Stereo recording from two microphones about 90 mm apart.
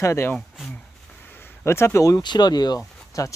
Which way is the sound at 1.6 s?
30° left (ahead or behind).